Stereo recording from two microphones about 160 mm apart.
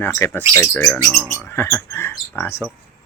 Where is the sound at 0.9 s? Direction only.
Centre (ahead or behind).